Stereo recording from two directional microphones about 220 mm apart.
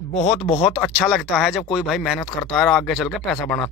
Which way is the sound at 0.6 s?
5° right (ahead or behind).